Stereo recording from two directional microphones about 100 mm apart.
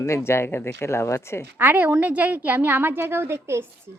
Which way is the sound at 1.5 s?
20° right (ahead or behind).